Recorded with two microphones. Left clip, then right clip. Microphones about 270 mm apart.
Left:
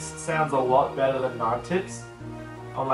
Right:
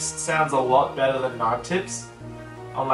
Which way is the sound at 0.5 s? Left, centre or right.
Left.